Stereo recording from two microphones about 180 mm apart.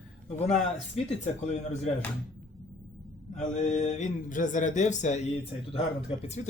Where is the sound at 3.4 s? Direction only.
45° left (ahead or behind).